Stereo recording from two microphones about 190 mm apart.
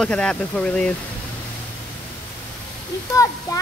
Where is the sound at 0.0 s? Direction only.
5° left (ahead or behind).